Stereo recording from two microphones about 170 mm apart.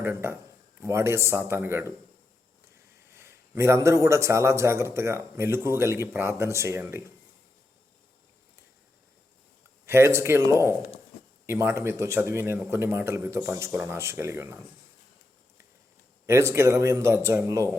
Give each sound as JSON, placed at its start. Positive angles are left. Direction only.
{"t": 0.0, "sound": "a man's voice", "side_deg": -15}
{"t": 3.1, "sound": "a man's voice", "side_deg": -15}
{"t": 9.8, "sound": "a man's voice", "side_deg": -15}
{"t": 16.2, "sound": "a man's voice", "side_deg": -15}